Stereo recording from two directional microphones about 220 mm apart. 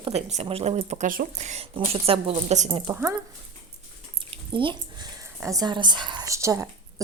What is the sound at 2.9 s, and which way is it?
Speech, 15° right (ahead or behind).